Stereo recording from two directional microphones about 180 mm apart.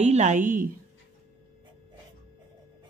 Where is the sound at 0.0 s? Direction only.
40° right (ahead or behind).